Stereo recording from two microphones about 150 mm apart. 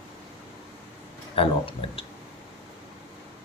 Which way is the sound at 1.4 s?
35° left (ahead or behind).